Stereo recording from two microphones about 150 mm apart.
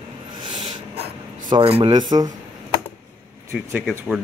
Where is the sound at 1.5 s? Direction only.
35° right (ahead or behind).